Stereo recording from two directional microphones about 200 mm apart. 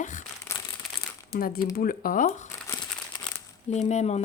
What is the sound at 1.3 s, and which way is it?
Speech, 45° left (ahead or behind).